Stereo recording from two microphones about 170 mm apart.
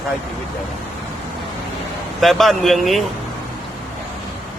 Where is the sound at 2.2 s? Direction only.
Centre (ahead or behind).